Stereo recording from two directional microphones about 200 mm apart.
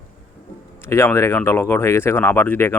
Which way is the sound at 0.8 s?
15° left (ahead or behind).